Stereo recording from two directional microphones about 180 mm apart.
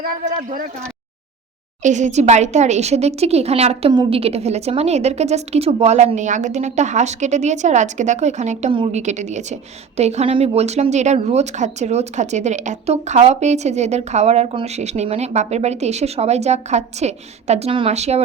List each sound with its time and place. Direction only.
0.0 s speech: 50° right (ahead or behind)
1.8 s speech: 40° right (ahead or behind)